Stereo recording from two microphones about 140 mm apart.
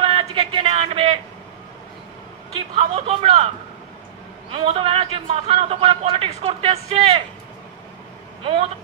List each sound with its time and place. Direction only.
0.0 s a sound: 40° right (ahead or behind)
2.7 s speech: 45° right (ahead or behind)
4.5 s a man's voice: 40° right (ahead or behind)